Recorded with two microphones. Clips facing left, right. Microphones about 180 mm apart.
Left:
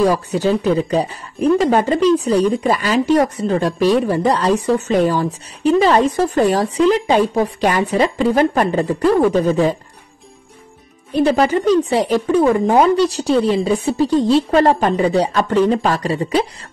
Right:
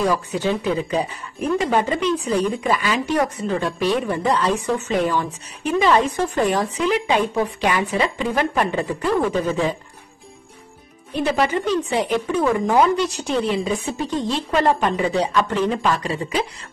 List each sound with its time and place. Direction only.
0.0 s speech: 40° left (ahead or behind)
11.1 s speech: 40° left (ahead or behind)